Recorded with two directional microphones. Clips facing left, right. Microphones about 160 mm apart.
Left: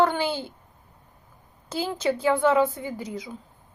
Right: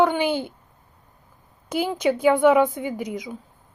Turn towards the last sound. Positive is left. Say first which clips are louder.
# right 4 dB
turn(degrees=-15)  # may be behind; listen again after turning